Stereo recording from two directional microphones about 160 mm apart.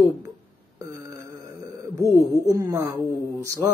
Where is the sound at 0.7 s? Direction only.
15° right (ahead or behind).